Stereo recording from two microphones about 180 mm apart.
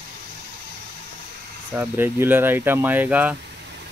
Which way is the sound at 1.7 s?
10° right (ahead or behind).